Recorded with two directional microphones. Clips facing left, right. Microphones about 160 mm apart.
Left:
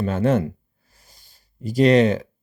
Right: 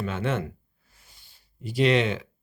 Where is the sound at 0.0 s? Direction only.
40° left (ahead or behind).